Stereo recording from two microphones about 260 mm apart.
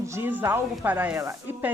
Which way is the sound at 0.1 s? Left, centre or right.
Centre.